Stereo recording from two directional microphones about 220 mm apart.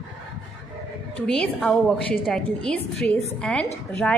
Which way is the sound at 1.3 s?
5° left (ahead or behind).